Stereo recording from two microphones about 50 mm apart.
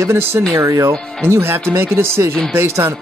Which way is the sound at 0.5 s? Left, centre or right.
Right.